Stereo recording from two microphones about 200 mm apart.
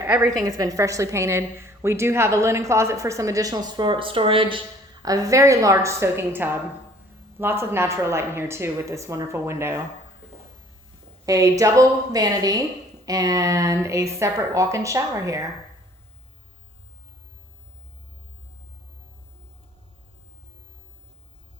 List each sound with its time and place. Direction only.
0.0 s a woman's voice: 10° right (ahead or behind)
11.3 s a woman's voice: 15° right (ahead or behind)